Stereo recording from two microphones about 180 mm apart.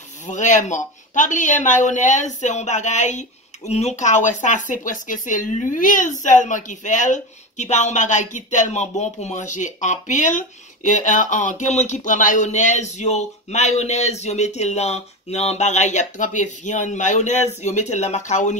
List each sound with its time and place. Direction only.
0.3 s speech: 45° left (ahead or behind)